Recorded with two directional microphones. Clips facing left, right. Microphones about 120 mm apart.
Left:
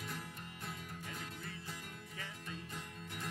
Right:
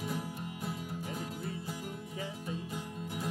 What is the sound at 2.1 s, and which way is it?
Music, 20° right (ahead or behind).